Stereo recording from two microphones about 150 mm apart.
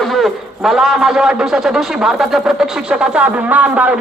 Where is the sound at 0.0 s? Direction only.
Centre (ahead or behind).